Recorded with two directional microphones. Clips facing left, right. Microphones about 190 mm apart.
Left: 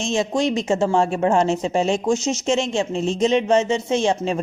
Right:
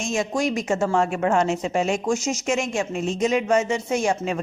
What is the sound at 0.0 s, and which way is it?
A woman's voice, 25° left (ahead or behind).